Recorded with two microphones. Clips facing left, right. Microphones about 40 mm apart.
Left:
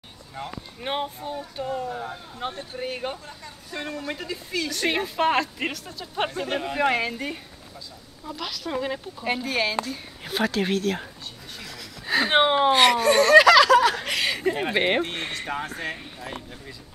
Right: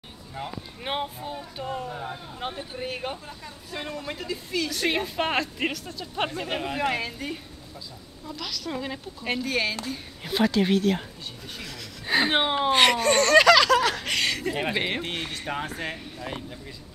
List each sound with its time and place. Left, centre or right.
0.3 s speech: centre
6.8 s speech: centre
10.7 s speech: centre
12.3 s speech: centre
12.7 s laughter: centre
14.7 s speech: centre
15.3 s speech: centre